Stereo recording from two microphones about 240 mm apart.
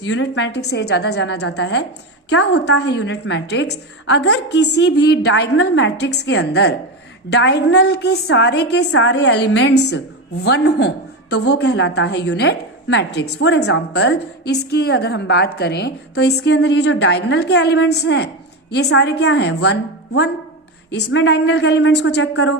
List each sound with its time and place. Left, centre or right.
0.0 s a woman's voice: left